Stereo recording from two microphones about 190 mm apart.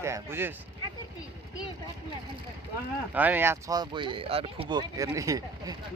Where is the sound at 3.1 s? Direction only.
10° right (ahead or behind).